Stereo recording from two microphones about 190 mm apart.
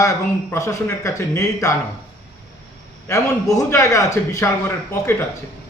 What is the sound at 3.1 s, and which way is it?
A man's voice, 15° left (ahead or behind).